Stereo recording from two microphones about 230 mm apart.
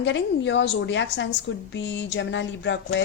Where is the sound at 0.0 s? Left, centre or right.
Left.